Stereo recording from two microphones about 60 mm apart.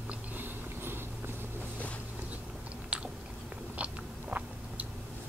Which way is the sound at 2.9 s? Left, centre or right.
Centre.